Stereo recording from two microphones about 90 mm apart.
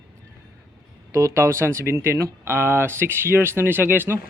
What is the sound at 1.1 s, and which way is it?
Speech, 35° right (ahead or behind).